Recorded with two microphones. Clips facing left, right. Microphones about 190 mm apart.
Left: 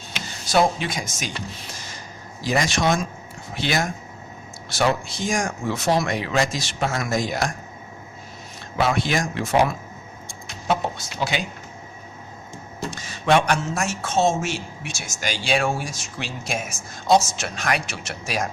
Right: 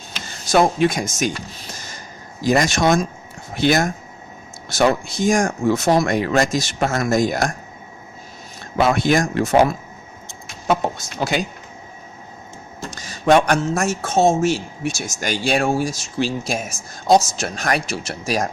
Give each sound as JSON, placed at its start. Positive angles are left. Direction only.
{"t": 0.5, "sound": "speech", "side_deg": -50}
{"t": 2.4, "sound": "speech", "side_deg": -45}
{"t": 8.7, "sound": "speech", "side_deg": -45}
{"t": 12.9, "sound": "a woman's voice", "side_deg": -40}